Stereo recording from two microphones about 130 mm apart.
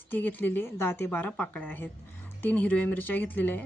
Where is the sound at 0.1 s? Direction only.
15° left (ahead or behind).